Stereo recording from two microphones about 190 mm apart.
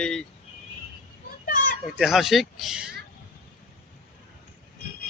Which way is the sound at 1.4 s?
50° left (ahead or behind).